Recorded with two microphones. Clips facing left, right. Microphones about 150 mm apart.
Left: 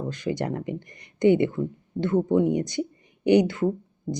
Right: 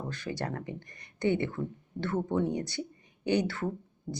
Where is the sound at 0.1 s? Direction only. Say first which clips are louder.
Left 8 dB; 15° left (ahead or behind).